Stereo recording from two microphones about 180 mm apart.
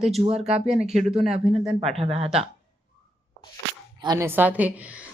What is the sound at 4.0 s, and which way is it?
Speech, 20° right (ahead or behind).